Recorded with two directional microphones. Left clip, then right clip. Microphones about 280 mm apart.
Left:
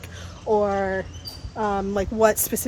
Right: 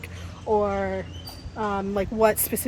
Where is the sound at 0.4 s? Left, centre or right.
Left.